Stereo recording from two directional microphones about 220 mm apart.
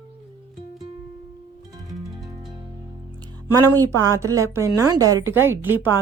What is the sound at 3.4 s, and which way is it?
A woman's voice, 15° right (ahead or behind).